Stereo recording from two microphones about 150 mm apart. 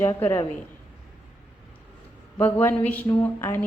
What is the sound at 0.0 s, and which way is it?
Speech, 15° left (ahead or behind).